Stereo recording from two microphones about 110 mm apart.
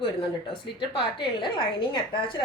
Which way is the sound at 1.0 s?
50° left (ahead or behind).